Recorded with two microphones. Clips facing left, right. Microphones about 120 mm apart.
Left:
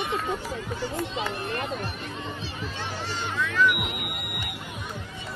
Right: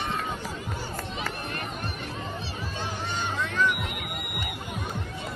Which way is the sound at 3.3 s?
25° right (ahead or behind).